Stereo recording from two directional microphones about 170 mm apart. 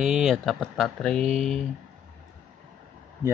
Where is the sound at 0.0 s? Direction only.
Centre (ahead or behind).